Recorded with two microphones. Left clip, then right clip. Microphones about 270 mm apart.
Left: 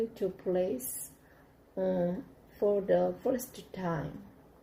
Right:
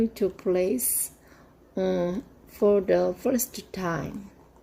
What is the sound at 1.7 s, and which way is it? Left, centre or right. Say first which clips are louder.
A woman's voice: right 5 dB; right.